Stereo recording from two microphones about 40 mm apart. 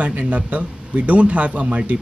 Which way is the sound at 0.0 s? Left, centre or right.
Right.